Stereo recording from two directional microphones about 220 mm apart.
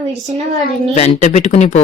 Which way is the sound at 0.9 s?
30° left (ahead or behind).